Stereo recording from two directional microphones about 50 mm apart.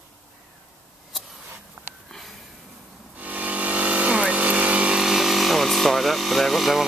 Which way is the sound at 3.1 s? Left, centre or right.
Right.